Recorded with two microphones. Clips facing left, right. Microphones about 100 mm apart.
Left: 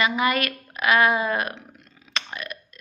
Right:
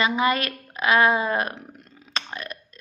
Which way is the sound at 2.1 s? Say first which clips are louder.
Even; 35° right (ahead or behind).